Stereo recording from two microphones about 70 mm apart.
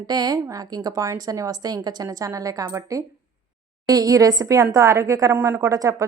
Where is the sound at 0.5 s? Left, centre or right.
Right.